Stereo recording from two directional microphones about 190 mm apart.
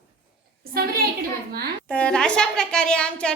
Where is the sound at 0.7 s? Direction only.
50° right (ahead or behind).